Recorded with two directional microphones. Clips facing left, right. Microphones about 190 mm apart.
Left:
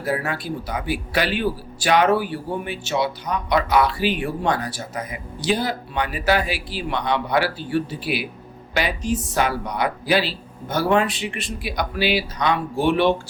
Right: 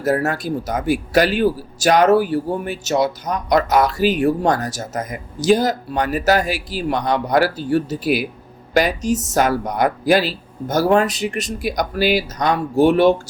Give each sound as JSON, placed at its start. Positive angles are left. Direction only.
{"t": 0.0, "sound": "a man's voice", "side_deg": -45}